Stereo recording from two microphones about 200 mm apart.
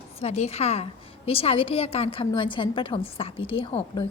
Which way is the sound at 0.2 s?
30° left (ahead or behind).